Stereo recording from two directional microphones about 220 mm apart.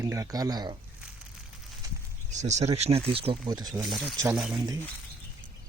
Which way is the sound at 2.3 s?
30° right (ahead or behind).